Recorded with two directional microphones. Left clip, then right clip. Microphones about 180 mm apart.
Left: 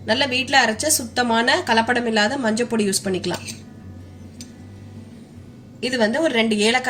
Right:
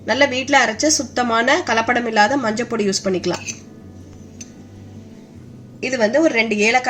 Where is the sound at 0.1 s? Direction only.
40° right (ahead or behind).